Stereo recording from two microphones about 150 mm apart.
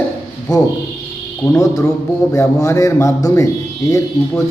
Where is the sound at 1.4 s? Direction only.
20° left (ahead or behind).